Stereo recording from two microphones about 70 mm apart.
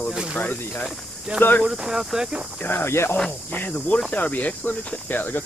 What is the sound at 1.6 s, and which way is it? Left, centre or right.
Speech, centre.